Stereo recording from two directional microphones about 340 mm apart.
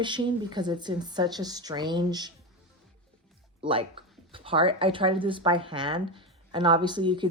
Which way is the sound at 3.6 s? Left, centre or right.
Centre.